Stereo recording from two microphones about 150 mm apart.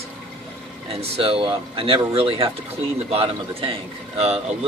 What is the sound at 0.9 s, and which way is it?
Speech, 40° right (ahead or behind).